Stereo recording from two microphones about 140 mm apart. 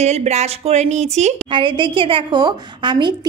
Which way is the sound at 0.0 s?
50° right (ahead or behind).